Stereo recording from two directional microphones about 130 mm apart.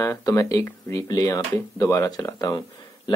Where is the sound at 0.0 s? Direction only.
25° left (ahead or behind).